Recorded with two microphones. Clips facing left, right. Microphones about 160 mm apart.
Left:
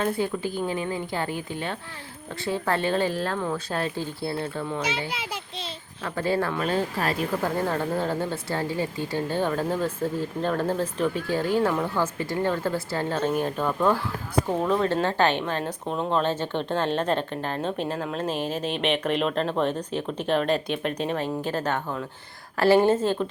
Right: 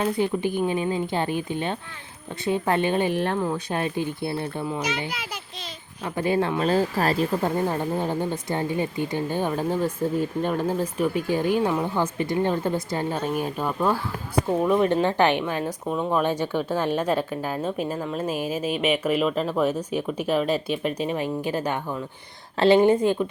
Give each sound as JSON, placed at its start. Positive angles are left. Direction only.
{"t": 0.2, "sound": "a woman's voice", "side_deg": -20}
{"t": 4.8, "sound": "a child's voice", "side_deg": 25}
{"t": 6.1, "sound": "speech", "side_deg": -20}
{"t": 6.6, "sound": "speech", "side_deg": -35}
{"t": 7.4, "sound": "speech", "side_deg": -15}
{"t": 22.5, "sound": "speech", "side_deg": -20}